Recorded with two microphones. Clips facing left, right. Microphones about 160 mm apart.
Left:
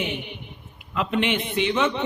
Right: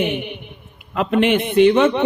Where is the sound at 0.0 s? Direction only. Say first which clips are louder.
Right 8 dB; 60° right (ahead or behind).